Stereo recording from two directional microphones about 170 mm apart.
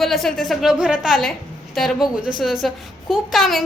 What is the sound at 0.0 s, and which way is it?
A woman's voice, centre (ahead or behind).